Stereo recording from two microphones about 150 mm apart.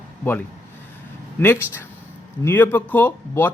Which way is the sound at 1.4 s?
15° left (ahead or behind).